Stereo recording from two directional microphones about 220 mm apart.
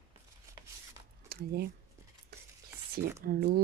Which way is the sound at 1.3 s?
45° right (ahead or behind).